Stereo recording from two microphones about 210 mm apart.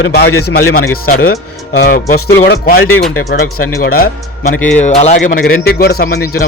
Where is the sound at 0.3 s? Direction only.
90° left.